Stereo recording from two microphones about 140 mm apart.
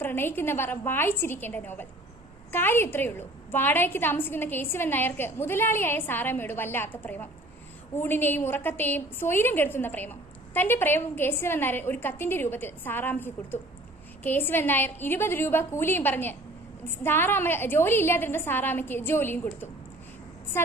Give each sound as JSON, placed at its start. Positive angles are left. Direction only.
{"t": 0.0, "sound": "a woman's voice", "side_deg": 15}